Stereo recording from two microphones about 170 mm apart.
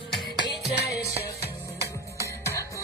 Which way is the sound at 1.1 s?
70° left (ahead or behind).